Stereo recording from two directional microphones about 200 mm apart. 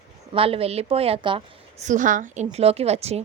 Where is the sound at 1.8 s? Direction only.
40° right (ahead or behind).